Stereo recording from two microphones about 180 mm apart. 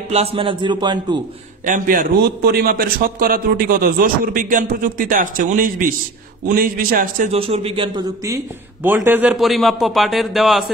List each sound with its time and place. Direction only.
0.1 s a man's voice: 30° right (ahead or behind)
1.9 s a man's voice: 55° right (ahead or behind)
7.3 s a man's voice: 30° right (ahead or behind); by 10.6 s centre (ahead or behind)